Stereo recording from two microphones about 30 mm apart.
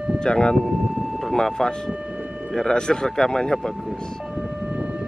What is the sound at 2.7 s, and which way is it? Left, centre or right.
Speech, left.